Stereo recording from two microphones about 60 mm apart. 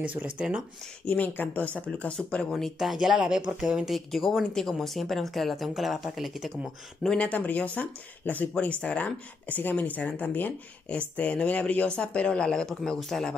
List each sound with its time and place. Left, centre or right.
0.0 s speech: right
1.0 s speech: left
2.5 s speech: centre
3.9 s speech: centre
7.2 s speech: left; by 13.3 s centre